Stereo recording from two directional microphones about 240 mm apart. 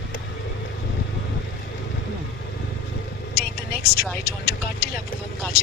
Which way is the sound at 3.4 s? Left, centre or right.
Left.